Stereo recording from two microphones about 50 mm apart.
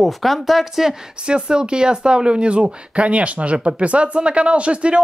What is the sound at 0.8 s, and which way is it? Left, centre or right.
Speech, centre.